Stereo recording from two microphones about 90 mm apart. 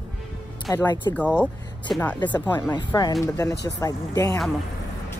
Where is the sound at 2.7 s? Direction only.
50° left (ahead or behind).